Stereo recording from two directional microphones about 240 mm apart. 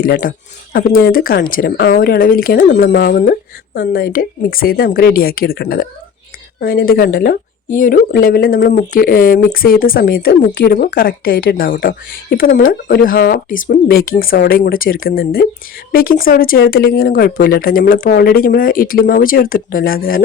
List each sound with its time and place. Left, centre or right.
0.0 s speech: left